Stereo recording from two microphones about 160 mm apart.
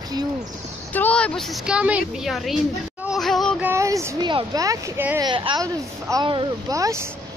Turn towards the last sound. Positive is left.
turn(degrees=-20)  # may be behind; listen again after turning